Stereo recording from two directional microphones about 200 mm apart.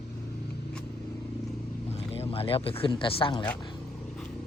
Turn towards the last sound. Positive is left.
turn(degrees=25)  # may be behind; listen again after turning